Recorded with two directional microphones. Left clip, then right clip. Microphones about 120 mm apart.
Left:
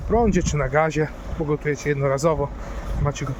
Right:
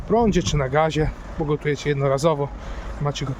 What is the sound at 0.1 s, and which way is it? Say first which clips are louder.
Speech: right 1 dB; 25° right (ahead or behind).